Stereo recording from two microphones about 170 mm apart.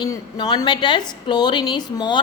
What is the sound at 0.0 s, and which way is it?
A woman's voice, 25° left (ahead or behind).